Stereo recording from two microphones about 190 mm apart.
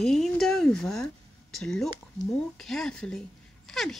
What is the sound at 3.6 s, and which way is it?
Dog, centre (ahead or behind).